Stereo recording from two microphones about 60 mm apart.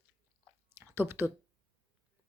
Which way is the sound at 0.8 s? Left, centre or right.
Right.